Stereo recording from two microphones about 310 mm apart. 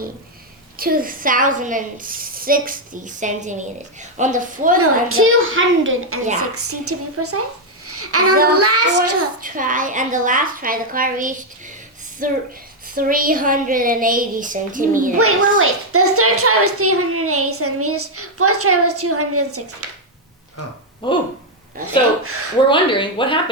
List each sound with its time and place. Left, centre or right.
0.8 s a woman's voice: right
4.8 s a child's voice: right
9.4 s a woman's voice: right
15.5 s a child's voice: right
21.0 s speech: centre
21.8 s a child's voice: right
22.7 s speech: centre